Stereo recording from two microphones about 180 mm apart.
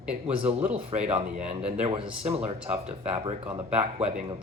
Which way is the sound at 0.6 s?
10° right (ahead or behind).